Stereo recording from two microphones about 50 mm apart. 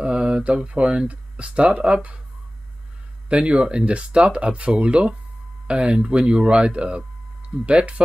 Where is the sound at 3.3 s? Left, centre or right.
Right.